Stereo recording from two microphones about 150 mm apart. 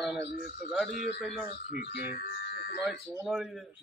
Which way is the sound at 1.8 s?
90° left.